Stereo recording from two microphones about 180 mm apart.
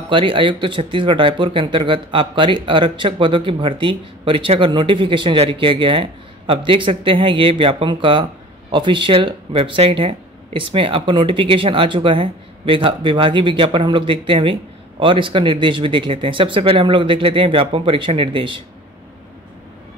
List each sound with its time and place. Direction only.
0.1 s speech: 30° right (ahead or behind)